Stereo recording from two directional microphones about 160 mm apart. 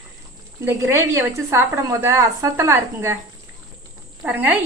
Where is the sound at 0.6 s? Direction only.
15° right (ahead or behind).